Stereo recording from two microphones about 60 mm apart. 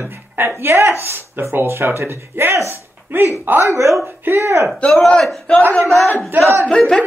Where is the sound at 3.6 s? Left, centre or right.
Right.